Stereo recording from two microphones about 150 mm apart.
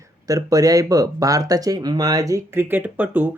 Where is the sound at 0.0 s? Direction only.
25° right (ahead or behind).